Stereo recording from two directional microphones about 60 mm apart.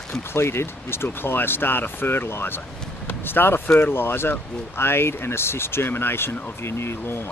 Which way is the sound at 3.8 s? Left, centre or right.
Left.